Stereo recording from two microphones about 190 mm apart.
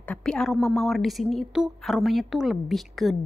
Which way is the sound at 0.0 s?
5° left (ahead or behind).